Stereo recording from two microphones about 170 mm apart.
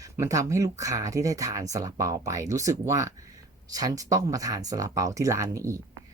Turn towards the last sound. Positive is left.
turn(degrees=-20)  # may be behind; listen again after turning